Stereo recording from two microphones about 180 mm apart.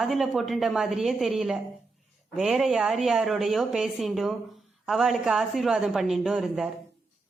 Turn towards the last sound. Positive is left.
turn(degrees=-5)  # may be behind; listen again after turning